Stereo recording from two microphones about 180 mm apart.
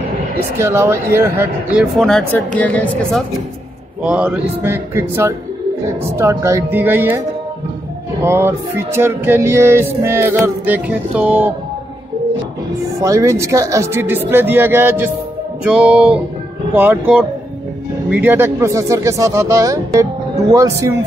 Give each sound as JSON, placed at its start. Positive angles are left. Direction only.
{"t": 0.6, "sound": "speech", "side_deg": -15}
{"t": 4.0, "sound": "speech", "side_deg": -5}
{"t": 8.2, "sound": "speech", "side_deg": -15}
{"t": 13.0, "sound": "speech", "side_deg": -15}